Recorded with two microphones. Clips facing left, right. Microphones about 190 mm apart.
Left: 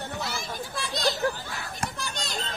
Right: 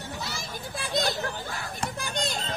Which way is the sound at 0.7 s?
55° right (ahead or behind).